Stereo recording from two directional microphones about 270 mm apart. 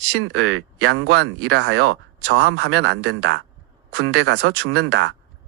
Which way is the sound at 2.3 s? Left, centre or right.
Right.